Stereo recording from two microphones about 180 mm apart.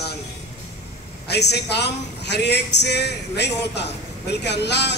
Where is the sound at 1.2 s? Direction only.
65° left (ahead or behind).